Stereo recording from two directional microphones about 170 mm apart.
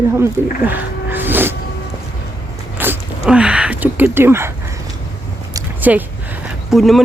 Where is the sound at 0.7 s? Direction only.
10° right (ahead or behind).